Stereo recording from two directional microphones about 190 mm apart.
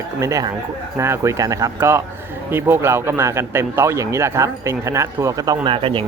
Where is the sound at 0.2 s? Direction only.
15° right (ahead or behind).